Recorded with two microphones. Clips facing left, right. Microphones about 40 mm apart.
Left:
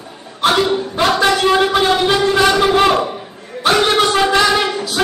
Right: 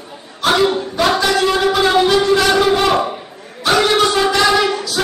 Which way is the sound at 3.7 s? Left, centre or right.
Left.